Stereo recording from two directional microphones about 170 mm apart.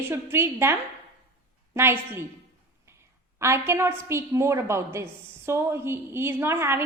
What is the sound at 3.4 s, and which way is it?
A woman's voice, 15° right (ahead or behind).